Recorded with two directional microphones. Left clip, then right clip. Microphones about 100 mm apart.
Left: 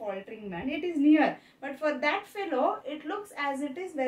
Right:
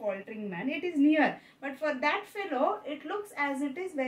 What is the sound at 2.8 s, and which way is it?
A woman's voice, 30° left (ahead or behind).